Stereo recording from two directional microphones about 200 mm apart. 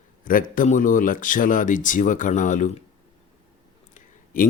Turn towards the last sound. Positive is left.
turn(degrees=40)  # may be behind; listen again after turning